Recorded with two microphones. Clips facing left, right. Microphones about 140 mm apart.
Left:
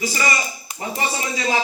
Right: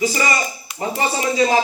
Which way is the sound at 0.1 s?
30° right (ahead or behind).